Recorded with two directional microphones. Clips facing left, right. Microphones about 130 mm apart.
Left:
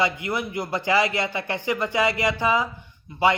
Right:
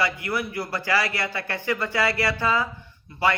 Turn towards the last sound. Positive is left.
turn(degrees=15)  # may be behind; listen again after turning